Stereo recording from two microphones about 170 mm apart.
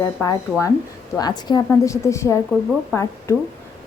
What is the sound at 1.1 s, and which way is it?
A woman's voice, 25° left (ahead or behind).